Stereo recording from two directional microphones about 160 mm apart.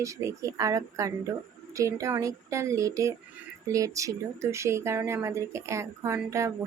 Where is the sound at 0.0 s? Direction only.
20° right (ahead or behind).